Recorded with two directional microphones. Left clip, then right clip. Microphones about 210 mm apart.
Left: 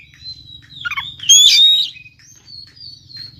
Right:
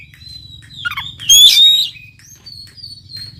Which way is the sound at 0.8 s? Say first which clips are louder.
Right 1 dB; centre (ahead or behind).